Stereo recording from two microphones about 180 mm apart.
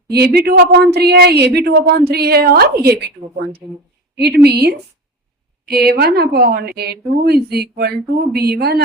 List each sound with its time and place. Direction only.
0.1 s a woman's voice: 60° right (ahead or behind)
4.2 s a woman's voice: 65° right (ahead or behind)